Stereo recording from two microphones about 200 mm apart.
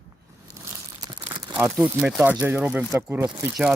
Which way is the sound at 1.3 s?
20° right (ahead or behind).